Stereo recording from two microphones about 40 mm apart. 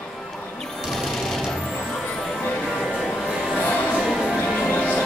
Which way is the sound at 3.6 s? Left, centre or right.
Left.